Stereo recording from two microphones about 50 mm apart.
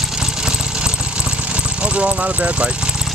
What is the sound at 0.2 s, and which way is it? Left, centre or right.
Vehicle, centre.